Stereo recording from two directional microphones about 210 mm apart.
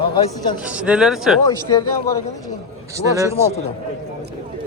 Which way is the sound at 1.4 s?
15° left (ahead or behind).